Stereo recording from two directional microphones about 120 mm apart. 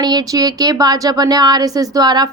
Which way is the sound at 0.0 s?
35° right (ahead or behind).